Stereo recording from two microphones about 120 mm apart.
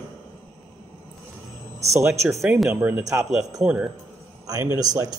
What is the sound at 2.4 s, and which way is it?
Speech, centre (ahead or behind).